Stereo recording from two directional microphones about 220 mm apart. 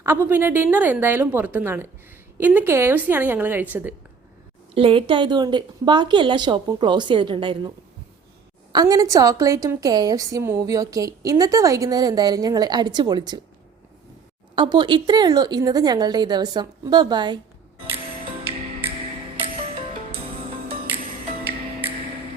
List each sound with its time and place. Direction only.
0.0 s a woman's voice: 10° right (ahead or behind)
4.7 s a woman's voice: 25° right (ahead or behind)
8.7 s a woman's voice: 15° right (ahead or behind)
14.5 s a woman's voice: 20° right (ahead or behind)
20.1 s music: 25° right (ahead or behind)